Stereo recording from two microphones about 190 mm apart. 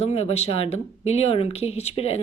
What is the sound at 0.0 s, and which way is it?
Speech, 30° left (ahead or behind).